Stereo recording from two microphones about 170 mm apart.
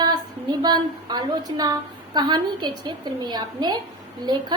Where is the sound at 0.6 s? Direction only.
25° right (ahead or behind).